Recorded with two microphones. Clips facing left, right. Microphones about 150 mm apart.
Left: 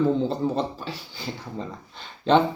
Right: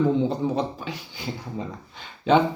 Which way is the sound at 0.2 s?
15° right (ahead or behind).